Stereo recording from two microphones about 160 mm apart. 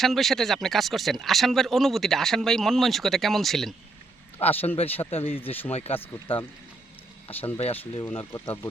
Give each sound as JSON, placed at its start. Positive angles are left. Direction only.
{"t": 0.0, "sound": "speech", "side_deg": 0}
{"t": 4.4, "sound": "speech", "side_deg": 40}
{"t": 5.4, "sound": "speech", "side_deg": 10}
{"t": 5.7, "sound": "speech", "side_deg": 40}
{"t": 7.6, "sound": "speech", "side_deg": 35}
{"t": 8.0, "sound": "speech", "side_deg": 15}